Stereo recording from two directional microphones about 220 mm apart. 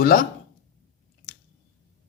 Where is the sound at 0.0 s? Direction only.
40° left (ahead or behind).